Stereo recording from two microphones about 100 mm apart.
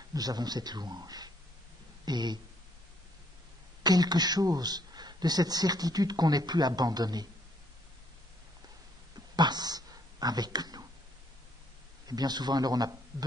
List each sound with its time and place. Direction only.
0.1 s speech: 40° right (ahead or behind)
3.8 s speech: 40° right (ahead or behind)
9.1 s a sound: 45° right (ahead or behind)
12.1 s a man's voice: 45° right (ahead or behind)